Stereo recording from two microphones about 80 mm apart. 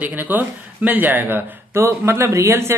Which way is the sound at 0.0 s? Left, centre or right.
Right.